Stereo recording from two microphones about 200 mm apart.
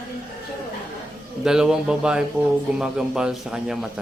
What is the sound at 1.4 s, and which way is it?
A man's voice, 5° right (ahead or behind).